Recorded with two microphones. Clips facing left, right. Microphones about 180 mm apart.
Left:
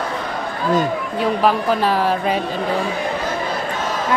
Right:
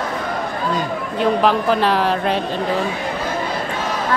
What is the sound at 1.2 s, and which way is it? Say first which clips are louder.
Speech: right 2 dB; 5° left (ahead or behind).